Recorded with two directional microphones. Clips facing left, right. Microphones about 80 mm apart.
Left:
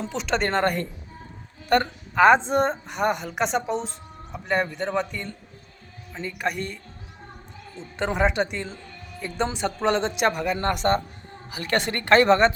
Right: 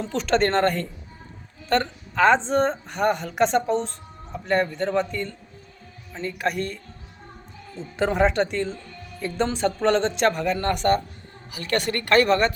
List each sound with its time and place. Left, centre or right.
0.0 s a man's voice: centre
7.8 s a man's voice: centre
10.6 s a woman's voice: left